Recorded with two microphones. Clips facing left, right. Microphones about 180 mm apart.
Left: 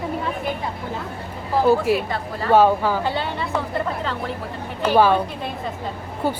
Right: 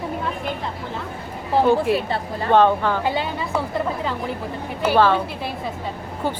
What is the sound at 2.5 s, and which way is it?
Speech, 5° left (ahead or behind).